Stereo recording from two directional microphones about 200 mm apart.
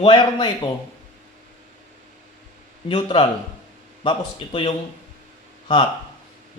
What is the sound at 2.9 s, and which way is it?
A man's voice, 25° left (ahead or behind).